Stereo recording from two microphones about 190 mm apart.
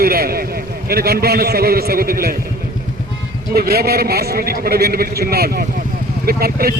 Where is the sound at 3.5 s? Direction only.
55° right (ahead or behind).